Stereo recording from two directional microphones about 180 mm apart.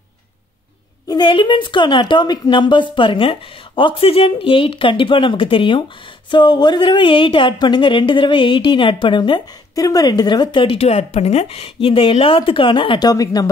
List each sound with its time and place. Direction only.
1.0 s speech: 25° left (ahead or behind)